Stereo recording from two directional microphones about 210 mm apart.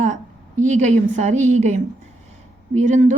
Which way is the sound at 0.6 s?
35° right (ahead or behind).